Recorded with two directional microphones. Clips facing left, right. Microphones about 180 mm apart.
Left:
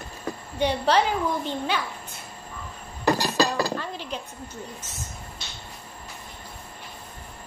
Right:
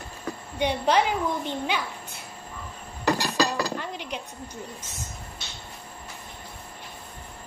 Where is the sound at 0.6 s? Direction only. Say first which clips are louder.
Left 1 dB; 10° right (ahead or behind).